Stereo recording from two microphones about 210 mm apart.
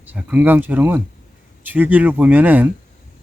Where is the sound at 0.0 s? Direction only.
5° right (ahead or behind).